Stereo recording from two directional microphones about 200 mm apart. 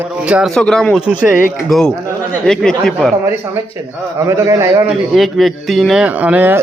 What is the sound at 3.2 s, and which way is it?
A man's voice, 15° right (ahead or behind).